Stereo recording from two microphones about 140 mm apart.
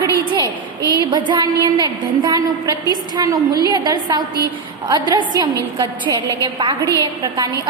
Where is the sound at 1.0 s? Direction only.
30° right (ahead or behind).